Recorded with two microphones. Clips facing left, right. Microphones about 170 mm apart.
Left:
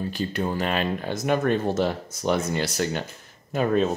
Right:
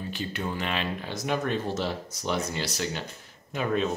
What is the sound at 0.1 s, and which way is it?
Speech, 40° left (ahead or behind).